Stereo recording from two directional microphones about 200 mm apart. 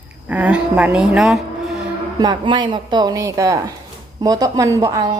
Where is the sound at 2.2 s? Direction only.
20° right (ahead or behind).